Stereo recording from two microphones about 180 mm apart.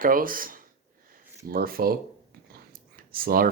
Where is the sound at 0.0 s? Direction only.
50° right (ahead or behind).